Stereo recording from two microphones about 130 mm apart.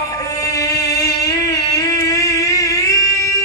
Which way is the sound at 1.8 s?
30° left (ahead or behind).